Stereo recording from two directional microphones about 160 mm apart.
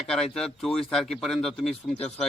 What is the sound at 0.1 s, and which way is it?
A man's voice, 5° left (ahead or behind).